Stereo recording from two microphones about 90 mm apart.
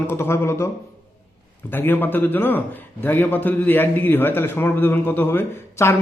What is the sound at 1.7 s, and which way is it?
A man's voice, 25° left (ahead or behind).